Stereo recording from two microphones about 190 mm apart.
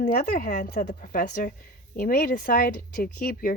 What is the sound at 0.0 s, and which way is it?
A woman's voice, 50° left (ahead or behind).